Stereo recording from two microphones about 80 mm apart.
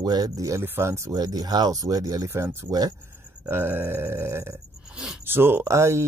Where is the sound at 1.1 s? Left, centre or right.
Right.